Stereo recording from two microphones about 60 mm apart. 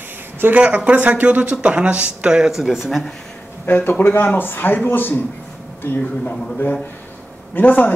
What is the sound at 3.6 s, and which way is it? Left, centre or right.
Speech, left.